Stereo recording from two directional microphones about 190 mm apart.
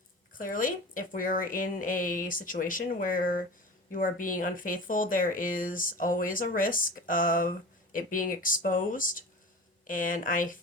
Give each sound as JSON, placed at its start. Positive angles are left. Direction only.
{"t": 0.3, "sound": "speech", "side_deg": 45}